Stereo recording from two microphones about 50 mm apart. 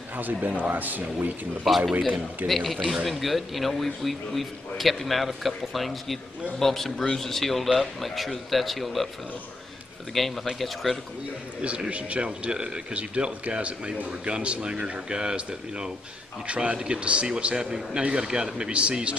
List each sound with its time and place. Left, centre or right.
0.2 s speech: right
2.0 s a man's voice: centre
2.4 s a man's voice: centre
10.1 s a man's voice: centre
11.6 s a man's voice: right